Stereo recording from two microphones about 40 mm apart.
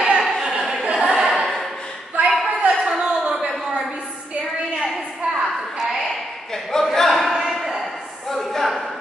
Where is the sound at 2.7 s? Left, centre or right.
Centre.